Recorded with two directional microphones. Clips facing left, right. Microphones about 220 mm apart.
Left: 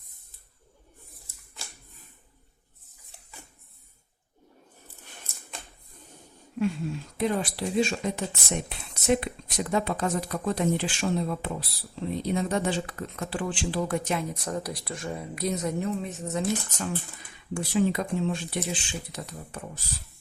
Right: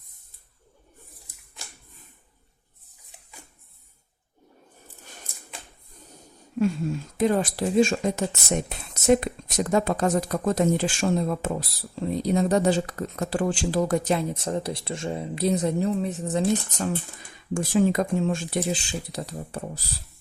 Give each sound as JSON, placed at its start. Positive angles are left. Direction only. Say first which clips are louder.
{"t": 7.2, "sound": "speech", "louder": "right 5 dB", "side_deg": -45}